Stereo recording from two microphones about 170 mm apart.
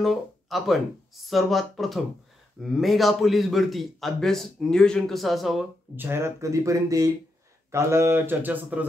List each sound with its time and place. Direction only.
0.0 s a man's voice: centre (ahead or behind)
5.9 s speech: 15° right (ahead or behind)